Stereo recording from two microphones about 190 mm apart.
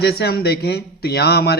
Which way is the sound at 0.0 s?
55° left (ahead or behind).